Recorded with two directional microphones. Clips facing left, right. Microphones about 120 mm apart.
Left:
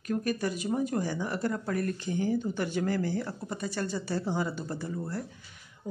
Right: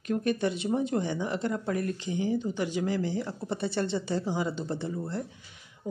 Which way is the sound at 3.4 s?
30° right (ahead or behind).